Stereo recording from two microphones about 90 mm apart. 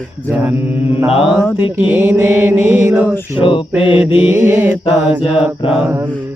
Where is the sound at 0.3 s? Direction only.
20° right (ahead or behind).